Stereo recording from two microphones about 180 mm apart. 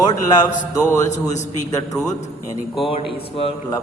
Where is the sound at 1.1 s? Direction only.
40° left (ahead or behind).